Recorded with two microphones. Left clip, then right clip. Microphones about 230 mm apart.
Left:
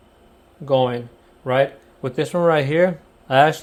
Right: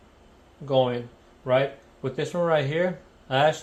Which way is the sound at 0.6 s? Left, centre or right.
Left.